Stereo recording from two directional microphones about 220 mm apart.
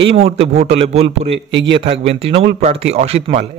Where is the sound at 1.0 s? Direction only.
55° right (ahead or behind).